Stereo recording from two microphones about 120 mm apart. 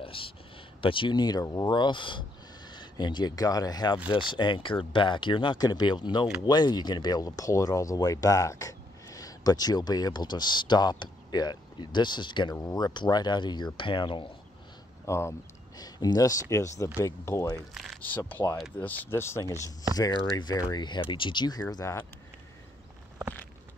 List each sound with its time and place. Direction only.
0.0 s a sound: 50° left (ahead or behind)
0.7 s speech: 45° left (ahead or behind)
15.0 s speech: 20° left (ahead or behind)
19.6 s speech: 35° left (ahead or behind)